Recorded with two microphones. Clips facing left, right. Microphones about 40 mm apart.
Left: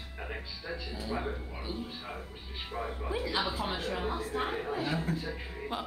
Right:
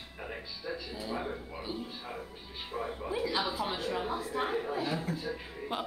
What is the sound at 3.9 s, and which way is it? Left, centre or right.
Speech, centre.